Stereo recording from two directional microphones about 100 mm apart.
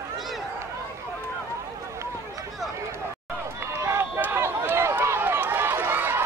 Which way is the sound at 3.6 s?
25° right (ahead or behind).